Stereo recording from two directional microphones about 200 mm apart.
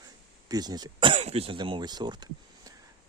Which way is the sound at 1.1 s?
30° right (ahead or behind).